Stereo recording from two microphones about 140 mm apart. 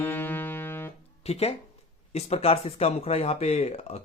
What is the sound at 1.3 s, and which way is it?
Music, 45° left (ahead or behind).